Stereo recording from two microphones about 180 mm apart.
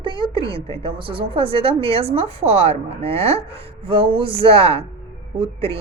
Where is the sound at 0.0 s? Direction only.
30° right (ahead or behind).